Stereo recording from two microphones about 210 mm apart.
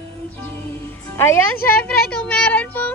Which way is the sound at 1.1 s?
10° left (ahead or behind).